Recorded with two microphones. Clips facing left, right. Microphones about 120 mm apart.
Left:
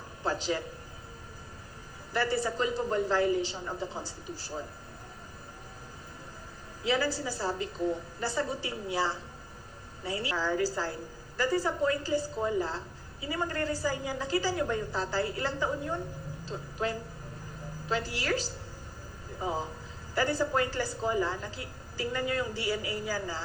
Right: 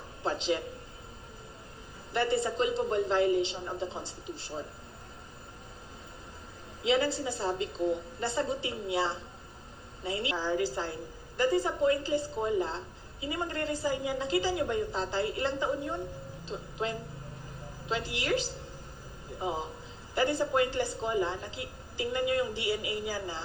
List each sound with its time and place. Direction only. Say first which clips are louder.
0.3 s a man's voice: right 1 dB; 25° right (ahead or behind)
2.1 s a woman's voice: right 1 dB; 25° right (ahead or behind)
6.8 s a woman's voice: right 2 dB; 25° right (ahead or behind)
13.9 s a woman's voice: right 2 dB; 35° left (ahead or behind)
14.2 s a woman's voice: right 1 dB; 25° right (ahead or behind)